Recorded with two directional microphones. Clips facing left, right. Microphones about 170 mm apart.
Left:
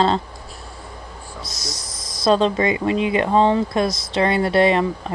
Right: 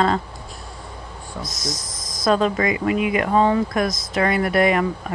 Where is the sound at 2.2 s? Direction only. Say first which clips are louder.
Left 2 dB; 30° left (ahead or behind).